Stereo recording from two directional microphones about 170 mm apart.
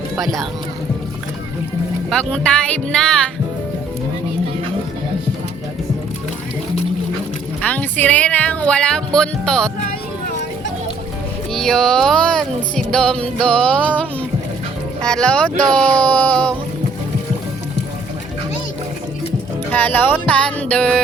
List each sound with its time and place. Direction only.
0.2 s music: centre (ahead or behind)
2.0 s music: 5° left (ahead or behind)
7.6 s speech: 10° left (ahead or behind)
11.5 s music: centre (ahead or behind)
16.0 s speech: 5° left (ahead or behind)
19.7 s speech: 10° left (ahead or behind)